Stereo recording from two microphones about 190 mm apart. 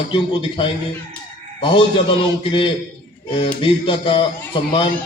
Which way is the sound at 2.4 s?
25° left (ahead or behind).